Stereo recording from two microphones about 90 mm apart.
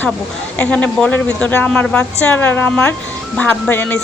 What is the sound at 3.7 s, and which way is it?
Speech, 20° left (ahead or behind).